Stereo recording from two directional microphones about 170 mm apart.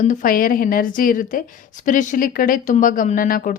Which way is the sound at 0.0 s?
50° left (ahead or behind).